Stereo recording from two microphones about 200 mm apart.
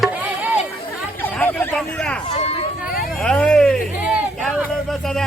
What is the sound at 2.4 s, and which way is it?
Speech, 30° left (ahead or behind).